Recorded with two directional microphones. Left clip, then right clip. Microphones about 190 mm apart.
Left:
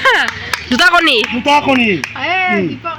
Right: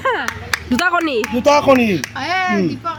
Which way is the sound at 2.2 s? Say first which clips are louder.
Left 3 dB; 15° left (ahead or behind).